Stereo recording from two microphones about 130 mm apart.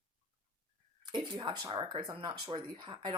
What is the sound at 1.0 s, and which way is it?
Speech, 35° right (ahead or behind).